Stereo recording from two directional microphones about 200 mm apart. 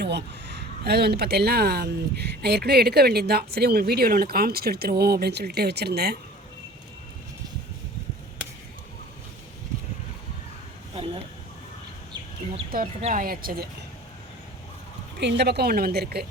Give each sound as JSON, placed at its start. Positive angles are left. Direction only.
{"t": 0.0, "sound": "speech", "side_deg": -55}
{"t": 10.9, "sound": "a sound", "side_deg": -30}
{"t": 12.7, "sound": "speech", "side_deg": -40}
{"t": 15.2, "sound": "speech", "side_deg": -55}